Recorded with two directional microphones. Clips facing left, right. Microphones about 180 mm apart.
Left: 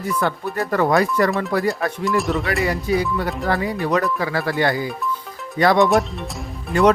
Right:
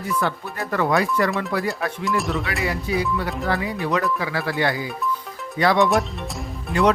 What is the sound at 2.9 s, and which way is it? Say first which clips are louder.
Speech: left 3 dB; 45° left (ahead or behind).